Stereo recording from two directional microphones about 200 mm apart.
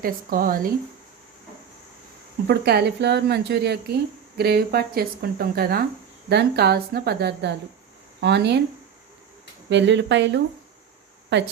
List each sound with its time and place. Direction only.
0.0 s a woman's voice: 45° right (ahead or behind)
2.5 s a woman's voice: 55° right (ahead or behind)
9.6 s speech: 60° right (ahead or behind)